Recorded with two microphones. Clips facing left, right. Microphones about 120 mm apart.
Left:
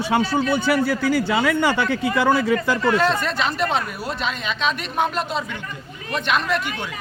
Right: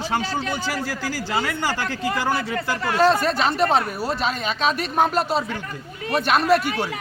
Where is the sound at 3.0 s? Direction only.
35° right (ahead or behind).